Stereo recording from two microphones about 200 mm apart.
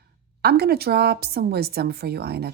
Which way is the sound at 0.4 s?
55° right (ahead or behind).